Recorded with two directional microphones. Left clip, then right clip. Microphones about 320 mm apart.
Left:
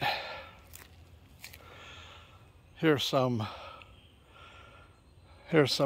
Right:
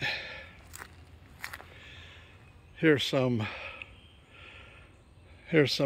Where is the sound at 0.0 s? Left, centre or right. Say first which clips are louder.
Left 1 dB; centre.